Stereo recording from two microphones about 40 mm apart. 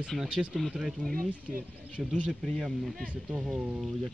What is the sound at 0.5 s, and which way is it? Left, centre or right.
Speech, centre.